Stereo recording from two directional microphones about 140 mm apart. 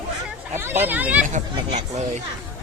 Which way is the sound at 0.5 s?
15° right (ahead or behind).